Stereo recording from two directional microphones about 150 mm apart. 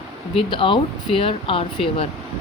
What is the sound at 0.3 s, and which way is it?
Speech, 35° left (ahead or behind).